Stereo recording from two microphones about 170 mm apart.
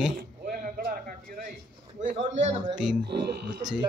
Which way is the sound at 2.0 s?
45° right (ahead or behind).